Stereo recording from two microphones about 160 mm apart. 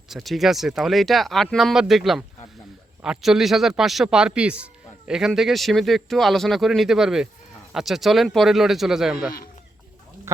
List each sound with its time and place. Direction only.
0.1 s speech: centre (ahead or behind)
10.3 s speech: 15° right (ahead or behind)